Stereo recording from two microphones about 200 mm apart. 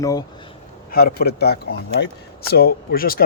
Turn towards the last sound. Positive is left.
turn(degrees=50)  # may be behind; listen again after turning